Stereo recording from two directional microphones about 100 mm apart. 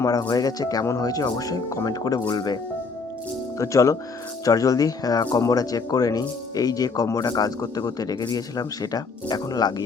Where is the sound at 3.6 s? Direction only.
35° left (ahead or behind).